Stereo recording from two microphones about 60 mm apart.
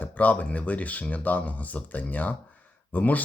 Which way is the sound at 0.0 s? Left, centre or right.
Left.